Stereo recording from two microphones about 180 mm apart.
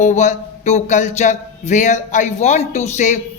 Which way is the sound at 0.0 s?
40° left (ahead or behind).